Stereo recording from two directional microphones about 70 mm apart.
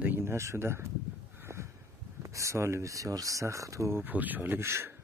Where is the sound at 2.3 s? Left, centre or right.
Right.